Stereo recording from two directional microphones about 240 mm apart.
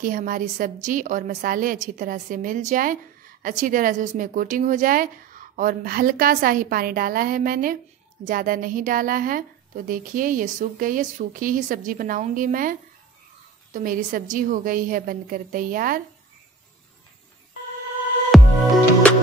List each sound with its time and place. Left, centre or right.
0.0 s a woman's voice: right
13.7 s a woman's voice: right
18.3 s music: centre